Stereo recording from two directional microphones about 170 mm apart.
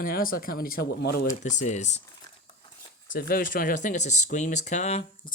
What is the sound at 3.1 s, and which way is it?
Speech, 60° left (ahead or behind).